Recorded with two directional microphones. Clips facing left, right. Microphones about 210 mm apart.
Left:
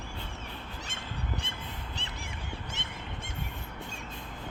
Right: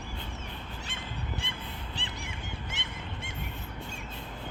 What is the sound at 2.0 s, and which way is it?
Honk, 45° left (ahead or behind).